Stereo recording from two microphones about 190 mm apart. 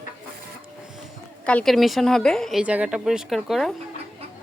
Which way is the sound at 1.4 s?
5° left (ahead or behind).